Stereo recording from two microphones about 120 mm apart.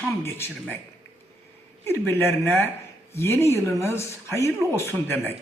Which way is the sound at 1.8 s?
20° left (ahead or behind).